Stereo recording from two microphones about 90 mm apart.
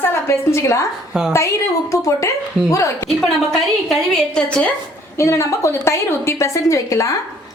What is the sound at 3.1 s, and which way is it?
A woman's voice, 5° left (ahead or behind).